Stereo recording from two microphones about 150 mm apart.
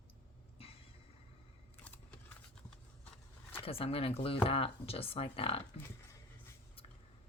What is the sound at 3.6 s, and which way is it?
Speech, 40° left (ahead or behind).